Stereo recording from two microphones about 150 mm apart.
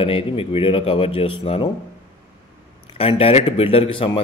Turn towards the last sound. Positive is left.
turn(degrees=35)  # may be behind; listen again after turning